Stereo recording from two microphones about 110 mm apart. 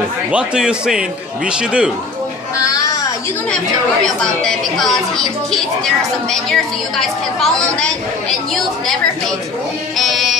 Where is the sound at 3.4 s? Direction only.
5° left (ahead or behind).